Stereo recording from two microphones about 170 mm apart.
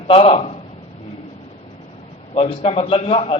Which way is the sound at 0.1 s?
35° left (ahead or behind).